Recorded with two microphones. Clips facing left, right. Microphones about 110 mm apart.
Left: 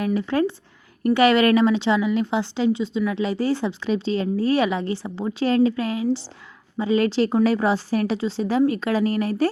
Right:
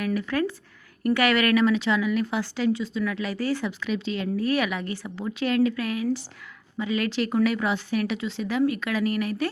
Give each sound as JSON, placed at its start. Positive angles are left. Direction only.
{"t": 0.0, "sound": "a woman's voice", "side_deg": 25}